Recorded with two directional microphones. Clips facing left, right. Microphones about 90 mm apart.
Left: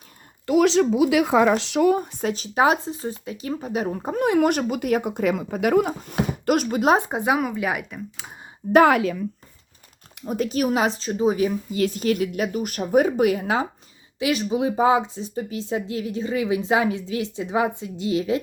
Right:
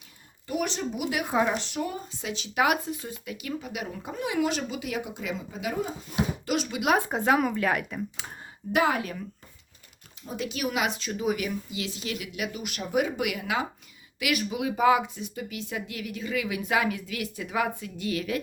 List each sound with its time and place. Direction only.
0.4 s speech: 90° left; by 6.9 s 45° left (ahead or behind)
6.9 s speech: 20° left (ahead or behind)
7.3 s speech: 5° left (ahead or behind)
8.6 s a woman's voice: 35° left (ahead or behind)
10.3 s a woman's voice: 45° left (ahead or behind)
11.7 s a woman's voice: 45° left (ahead or behind); by 18.4 s 25° left (ahead or behind)